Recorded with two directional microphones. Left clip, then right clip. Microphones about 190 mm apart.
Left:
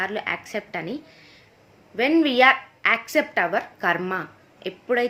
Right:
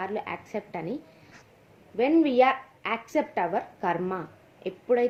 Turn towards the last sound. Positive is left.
turn(degrees=20)  # may be behind; listen again after turning